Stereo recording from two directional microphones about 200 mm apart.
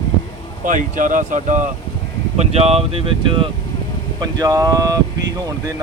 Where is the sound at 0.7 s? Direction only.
40° right (ahead or behind).